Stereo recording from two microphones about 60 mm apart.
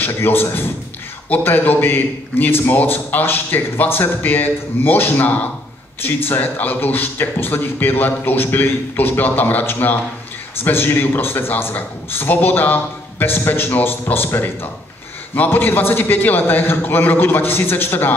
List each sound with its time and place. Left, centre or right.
0.0 s a man's voice: left